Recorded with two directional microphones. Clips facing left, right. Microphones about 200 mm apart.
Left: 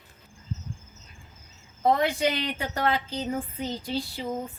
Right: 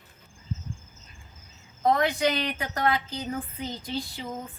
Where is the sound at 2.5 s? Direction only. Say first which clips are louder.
Even; 30° left (ahead or behind).